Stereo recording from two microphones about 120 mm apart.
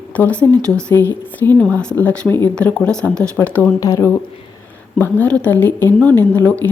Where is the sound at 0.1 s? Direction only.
15° left (ahead or behind).